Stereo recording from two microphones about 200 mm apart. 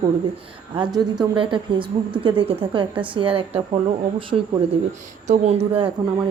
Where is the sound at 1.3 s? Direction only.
25° right (ahead or behind).